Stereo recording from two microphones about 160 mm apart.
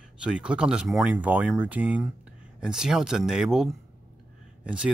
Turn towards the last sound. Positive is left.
turn(degrees=-5)  # may be behind; listen again after turning